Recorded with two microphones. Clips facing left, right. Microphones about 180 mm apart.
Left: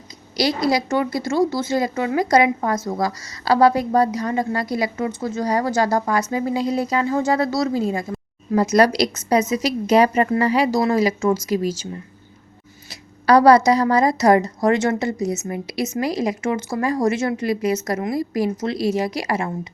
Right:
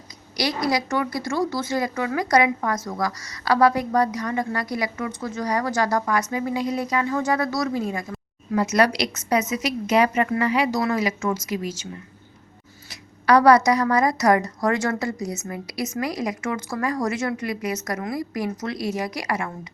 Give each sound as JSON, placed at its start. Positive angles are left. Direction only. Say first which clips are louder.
{"t": 0.3, "sound": "a woman's voice", "louder": "left 4 dB", "side_deg": 25}
{"t": 12.9, "sound": "a woman's voice", "louder": "left 3 dB", "side_deg": 30}